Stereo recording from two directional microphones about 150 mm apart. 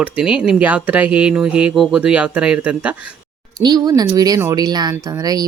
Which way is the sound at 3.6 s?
25° right (ahead or behind).